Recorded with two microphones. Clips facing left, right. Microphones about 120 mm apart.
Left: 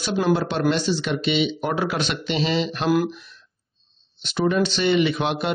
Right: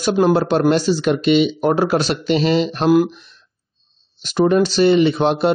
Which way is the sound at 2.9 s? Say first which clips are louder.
Right 7 dB; 25° right (ahead or behind).